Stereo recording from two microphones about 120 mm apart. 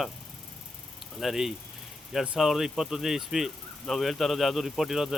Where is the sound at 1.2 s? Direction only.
5° right (ahead or behind).